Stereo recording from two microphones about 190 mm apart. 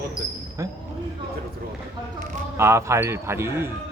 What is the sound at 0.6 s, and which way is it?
Speech, 15° right (ahead or behind).